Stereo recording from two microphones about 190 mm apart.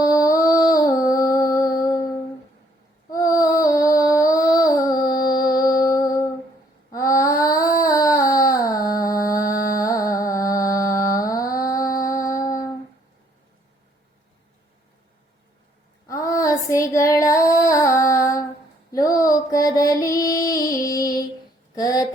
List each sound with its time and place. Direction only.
0.0 s music: 20° left (ahead or behind)
3.1 s child singing: 20° left (ahead or behind)
4.8 s music: 20° left (ahead or behind)
6.9 s child singing: 15° left (ahead or behind)
9.7 s music: 20° left (ahead or behind)
16.0 s child singing: 15° left (ahead or behind)
18.9 s female singing: 20° left (ahead or behind)
21.8 s a sound: 20° left (ahead or behind)